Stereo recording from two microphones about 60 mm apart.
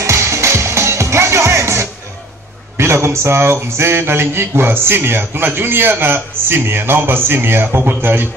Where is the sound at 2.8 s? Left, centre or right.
Right.